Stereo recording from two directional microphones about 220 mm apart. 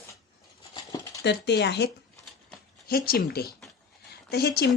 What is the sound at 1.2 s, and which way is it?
Speech, 50° left (ahead or behind).